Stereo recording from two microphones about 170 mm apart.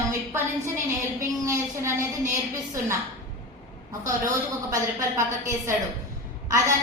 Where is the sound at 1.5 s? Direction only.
15° right (ahead or behind).